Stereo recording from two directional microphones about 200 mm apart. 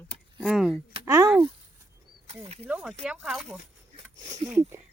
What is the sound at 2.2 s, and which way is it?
Speech, 30° right (ahead or behind).